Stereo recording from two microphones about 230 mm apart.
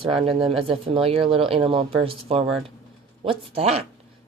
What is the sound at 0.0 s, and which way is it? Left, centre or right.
Speech, right.